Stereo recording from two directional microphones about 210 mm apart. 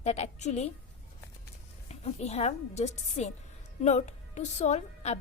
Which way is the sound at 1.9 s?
30° left (ahead or behind).